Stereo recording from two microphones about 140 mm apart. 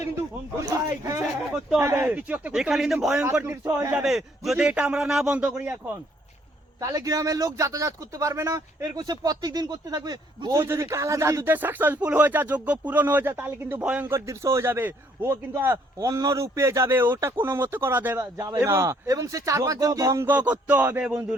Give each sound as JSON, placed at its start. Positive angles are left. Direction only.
{"t": 0.6, "sound": "a man's voice", "side_deg": -25}
{"t": 3.4, "sound": "speech", "side_deg": -20}
{"t": 3.9, "sound": "a man's voice", "side_deg": 0}
{"t": 6.7, "sound": "speech", "side_deg": -25}